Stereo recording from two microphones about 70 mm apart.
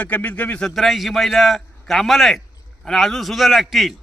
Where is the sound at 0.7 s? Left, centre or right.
Centre.